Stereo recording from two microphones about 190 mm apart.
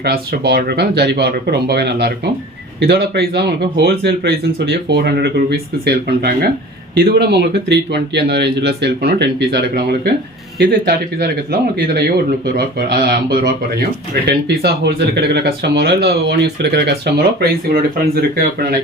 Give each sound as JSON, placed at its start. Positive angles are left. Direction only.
{"t": 0.0, "sound": "speech", "side_deg": -55}